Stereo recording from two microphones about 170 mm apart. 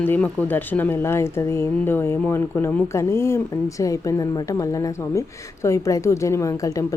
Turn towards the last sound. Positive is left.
turn(degrees=20)  # may be behind; listen again after turning